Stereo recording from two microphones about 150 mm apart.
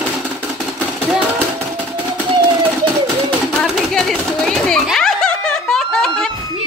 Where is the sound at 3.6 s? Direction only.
Centre (ahead or behind).